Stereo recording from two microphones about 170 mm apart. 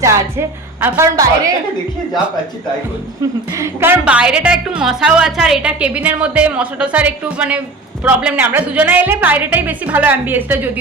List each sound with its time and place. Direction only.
0.0 s a woman's voice: 15° right (ahead or behind)
3.5 s a woman's voice: 15° right (ahead or behind)